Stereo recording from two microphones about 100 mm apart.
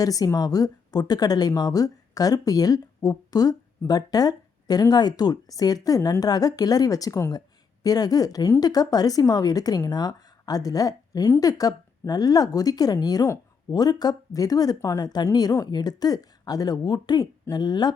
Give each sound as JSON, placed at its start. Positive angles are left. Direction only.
{"t": 0.0, "sound": "a woman's voice", "side_deg": 35}